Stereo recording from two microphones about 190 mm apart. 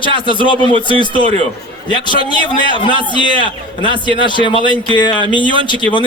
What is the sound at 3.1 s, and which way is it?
Speech, 25° left (ahead or behind).